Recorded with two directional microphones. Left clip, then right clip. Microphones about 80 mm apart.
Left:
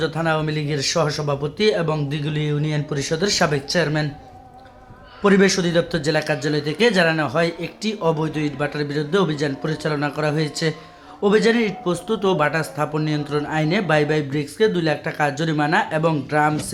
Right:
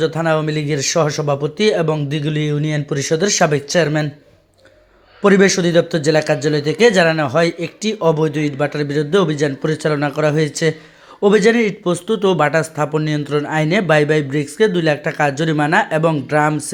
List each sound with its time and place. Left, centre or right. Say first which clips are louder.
0.0 s speech: right 5 dB; right
5.2 s speech: right 4 dB; right